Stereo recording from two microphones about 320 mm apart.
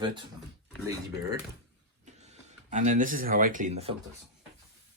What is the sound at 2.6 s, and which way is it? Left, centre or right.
Speech, right.